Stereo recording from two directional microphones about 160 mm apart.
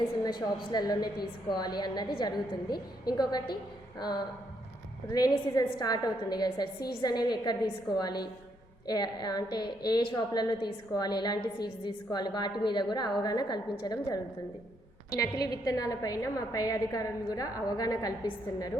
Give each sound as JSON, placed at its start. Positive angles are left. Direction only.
{"t": 0.3, "sound": "a woman's voice", "side_deg": 25}
{"t": 3.9, "sound": "a woman's voice", "side_deg": 25}
{"t": 6.7, "sound": "a woman's voice", "side_deg": 75}
{"t": 7.0, "sound": "a woman's voice", "side_deg": 25}